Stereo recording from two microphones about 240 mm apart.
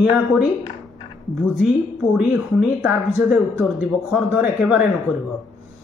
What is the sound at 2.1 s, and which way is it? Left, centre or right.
Speech, centre.